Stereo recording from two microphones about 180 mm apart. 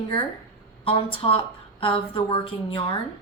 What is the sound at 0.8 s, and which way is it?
A woman's voice, 30° left (ahead or behind).